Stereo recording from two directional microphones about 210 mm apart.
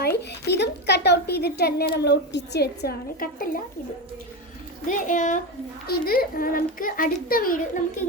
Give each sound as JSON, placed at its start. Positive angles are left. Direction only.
{"t": 0.2, "sound": "speech", "side_deg": 50}
{"t": 4.9, "sound": "a woman's voice", "side_deg": 40}